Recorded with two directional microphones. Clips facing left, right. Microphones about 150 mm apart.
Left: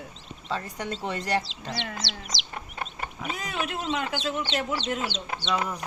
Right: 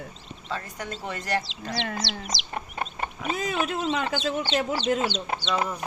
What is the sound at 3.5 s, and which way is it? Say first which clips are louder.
Speech: even; 50° right (ahead or behind).